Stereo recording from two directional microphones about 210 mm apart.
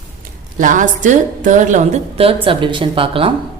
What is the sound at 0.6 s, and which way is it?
A woman's voice, 40° right (ahead or behind).